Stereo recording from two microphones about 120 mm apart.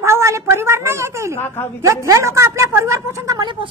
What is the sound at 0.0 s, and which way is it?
A woman's voice, 25° right (ahead or behind).